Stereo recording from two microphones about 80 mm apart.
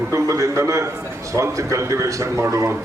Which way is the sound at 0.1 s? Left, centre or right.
Right.